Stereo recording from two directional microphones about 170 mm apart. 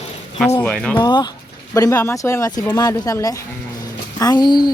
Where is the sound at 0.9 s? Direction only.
25° left (ahead or behind).